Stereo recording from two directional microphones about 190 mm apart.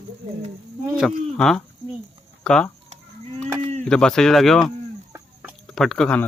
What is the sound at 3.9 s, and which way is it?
Speech, 5° left (ahead or behind).